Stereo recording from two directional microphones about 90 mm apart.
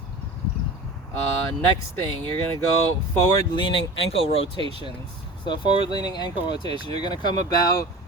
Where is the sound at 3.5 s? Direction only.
70° left (ahead or behind); by 4.5 s 90° left.